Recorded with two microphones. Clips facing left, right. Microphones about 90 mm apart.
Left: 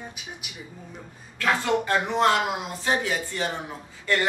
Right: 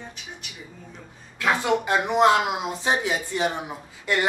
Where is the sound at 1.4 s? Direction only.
15° right (ahead or behind).